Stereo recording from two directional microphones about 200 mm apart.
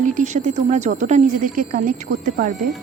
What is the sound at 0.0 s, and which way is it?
Speech, 40° right (ahead or behind).